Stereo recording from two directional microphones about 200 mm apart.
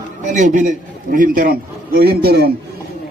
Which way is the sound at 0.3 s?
40° right (ahead or behind).